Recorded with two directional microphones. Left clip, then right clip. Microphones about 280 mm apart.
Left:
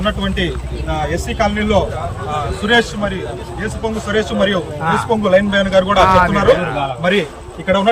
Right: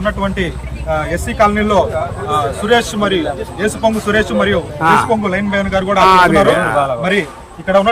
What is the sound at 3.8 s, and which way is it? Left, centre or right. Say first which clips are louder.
Speech: right 4 dB; centre.